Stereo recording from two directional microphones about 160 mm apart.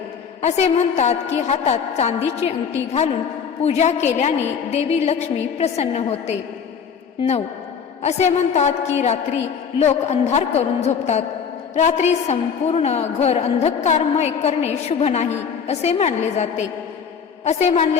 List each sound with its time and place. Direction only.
0.4 s a woman's voice: 40° left (ahead or behind)